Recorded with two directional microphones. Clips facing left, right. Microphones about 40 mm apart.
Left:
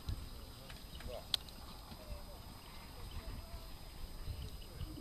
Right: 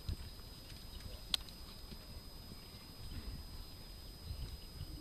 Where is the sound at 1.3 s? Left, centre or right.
Centre.